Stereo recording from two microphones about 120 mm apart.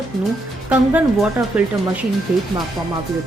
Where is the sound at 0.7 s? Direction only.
10° right (ahead or behind).